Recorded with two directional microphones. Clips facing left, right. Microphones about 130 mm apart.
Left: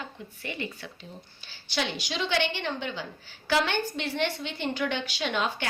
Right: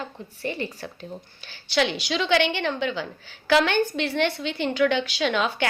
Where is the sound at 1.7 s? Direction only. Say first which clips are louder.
Right 7 dB; 85° right.